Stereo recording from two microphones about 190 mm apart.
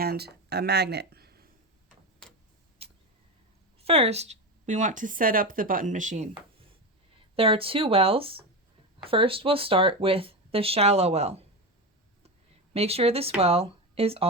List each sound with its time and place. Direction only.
0.0 s speech: 55° right (ahead or behind)
2.8 s a sound: 30° right (ahead or behind)
3.8 s speech: 30° right (ahead or behind)
7.3 s speech: 30° right (ahead or behind)
12.7 s speech: 30° right (ahead or behind)